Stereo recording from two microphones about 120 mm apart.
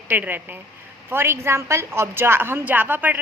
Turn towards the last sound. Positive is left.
turn(degrees=-15)  # may be behind; listen again after turning